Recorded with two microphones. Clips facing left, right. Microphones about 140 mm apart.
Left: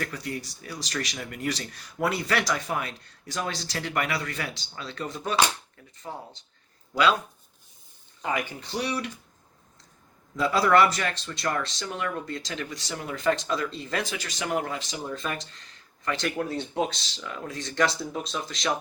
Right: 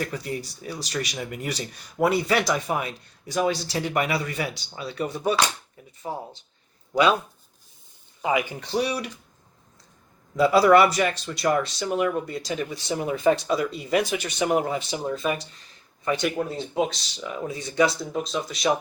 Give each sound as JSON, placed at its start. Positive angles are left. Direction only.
{"t": 0.0, "sound": "speech", "side_deg": -15}
{"t": 6.0, "sound": "speech", "side_deg": -30}
{"t": 6.9, "sound": "speech", "side_deg": -15}
{"t": 8.2, "sound": "speech", "side_deg": -10}
{"t": 10.3, "sound": "speech", "side_deg": -10}
{"t": 15.1, "sound": "speech", "side_deg": -5}